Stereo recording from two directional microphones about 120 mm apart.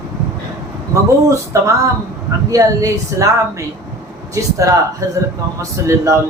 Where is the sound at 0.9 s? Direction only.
25° right (ahead or behind).